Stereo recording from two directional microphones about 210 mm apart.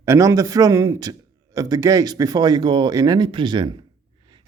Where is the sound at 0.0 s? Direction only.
15° right (ahead or behind).